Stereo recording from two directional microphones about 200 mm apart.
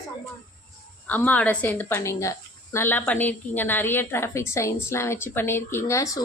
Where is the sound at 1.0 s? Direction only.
10° left (ahead or behind).